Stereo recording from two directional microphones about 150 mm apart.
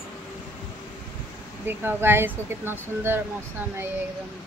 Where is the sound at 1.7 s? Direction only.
15° right (ahead or behind).